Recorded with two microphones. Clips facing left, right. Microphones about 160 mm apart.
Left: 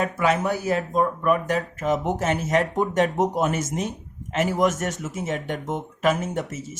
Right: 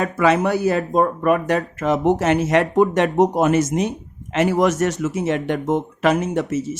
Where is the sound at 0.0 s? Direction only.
90° right.